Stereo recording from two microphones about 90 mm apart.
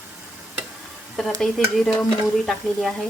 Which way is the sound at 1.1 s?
Centre (ahead or behind).